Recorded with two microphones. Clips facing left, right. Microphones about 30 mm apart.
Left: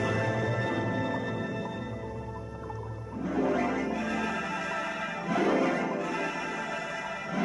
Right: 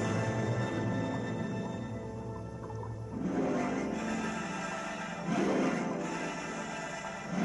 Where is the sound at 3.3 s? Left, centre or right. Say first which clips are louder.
Left 5 dB; left.